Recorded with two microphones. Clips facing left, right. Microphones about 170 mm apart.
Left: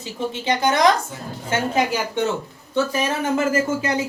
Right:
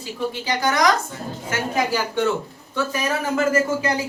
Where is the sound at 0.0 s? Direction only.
25° left (ahead or behind).